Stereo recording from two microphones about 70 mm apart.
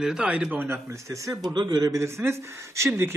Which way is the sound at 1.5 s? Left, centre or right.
Right.